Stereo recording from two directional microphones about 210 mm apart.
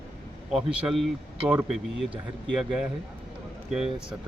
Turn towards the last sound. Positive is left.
turn(degrees=-5)  # may be behind; listen again after turning